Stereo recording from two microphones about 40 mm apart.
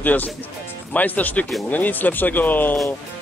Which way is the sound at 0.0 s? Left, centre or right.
Left.